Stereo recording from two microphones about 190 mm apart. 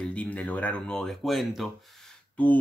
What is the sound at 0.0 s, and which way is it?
A man's voice, 5° left (ahead or behind).